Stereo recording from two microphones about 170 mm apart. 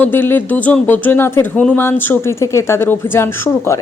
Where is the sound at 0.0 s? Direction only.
10° left (ahead or behind).